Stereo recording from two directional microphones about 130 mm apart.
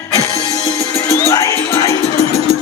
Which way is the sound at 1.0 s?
25° left (ahead or behind).